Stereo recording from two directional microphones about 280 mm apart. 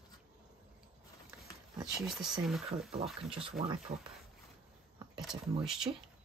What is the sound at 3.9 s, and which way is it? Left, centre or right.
Speech, right.